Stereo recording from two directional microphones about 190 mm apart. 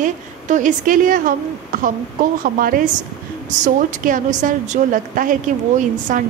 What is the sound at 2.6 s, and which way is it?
A woman's voice, 50° right (ahead or behind).